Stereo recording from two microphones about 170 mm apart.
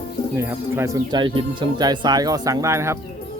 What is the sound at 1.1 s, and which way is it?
Speech, 30° right (ahead or behind).